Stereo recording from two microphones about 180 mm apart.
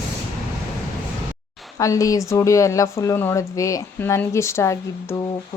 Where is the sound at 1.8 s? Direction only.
20° left (ahead or behind).